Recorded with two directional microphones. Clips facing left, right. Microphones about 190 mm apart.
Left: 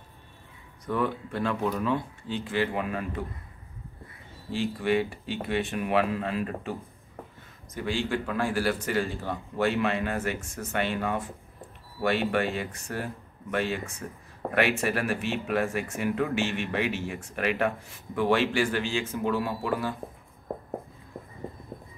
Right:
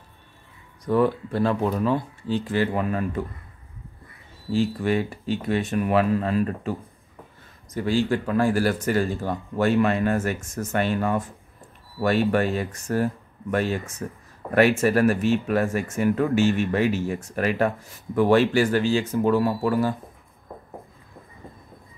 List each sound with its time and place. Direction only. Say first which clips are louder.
0.8 s speech: right 7 dB; 35° right (ahead or behind)
4.5 s speech: right 4 dB; 40° right (ahead or behind)
7.7 s speech: right 6 dB; 40° right (ahead or behind)